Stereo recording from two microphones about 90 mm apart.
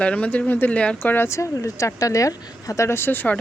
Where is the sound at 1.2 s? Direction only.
35° left (ahead or behind).